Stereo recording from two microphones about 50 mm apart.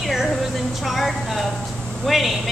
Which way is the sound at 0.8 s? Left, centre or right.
Centre.